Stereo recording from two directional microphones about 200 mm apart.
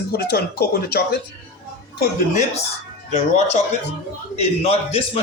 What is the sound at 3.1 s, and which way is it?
A man's voice, 35° left (ahead or behind).